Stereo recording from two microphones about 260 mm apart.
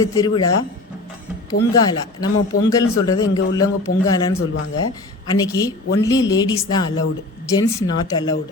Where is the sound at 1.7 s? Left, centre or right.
Centre.